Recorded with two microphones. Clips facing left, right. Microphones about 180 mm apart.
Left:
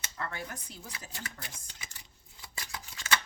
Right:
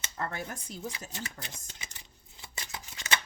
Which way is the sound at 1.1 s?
20° right (ahead or behind).